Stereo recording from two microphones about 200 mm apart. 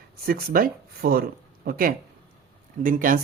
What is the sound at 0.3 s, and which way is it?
Speech, 45° right (ahead or behind).